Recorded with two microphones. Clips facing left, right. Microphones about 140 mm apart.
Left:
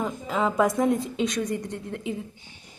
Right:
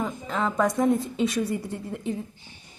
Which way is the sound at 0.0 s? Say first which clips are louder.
Left 2 dB; 5° left (ahead or behind).